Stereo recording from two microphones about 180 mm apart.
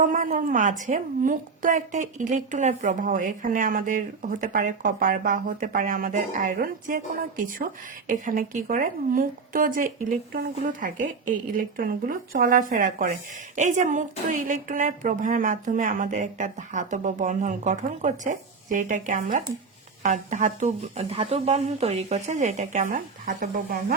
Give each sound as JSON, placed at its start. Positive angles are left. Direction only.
{"t": 0.0, "sound": "a woman's voice", "side_deg": -45}